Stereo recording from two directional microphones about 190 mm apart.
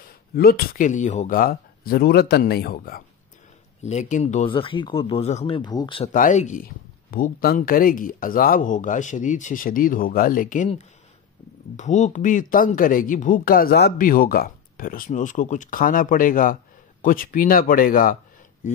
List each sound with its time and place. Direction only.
0.4 s speech: 50° left (ahead or behind)
3.8 s speech: 40° left (ahead or behind)
6.1 s speech: 40° left (ahead or behind)